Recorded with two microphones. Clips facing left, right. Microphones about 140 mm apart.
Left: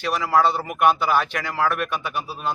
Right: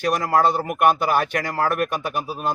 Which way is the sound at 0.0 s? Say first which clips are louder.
Right 1 dB; 45° right (ahead or behind).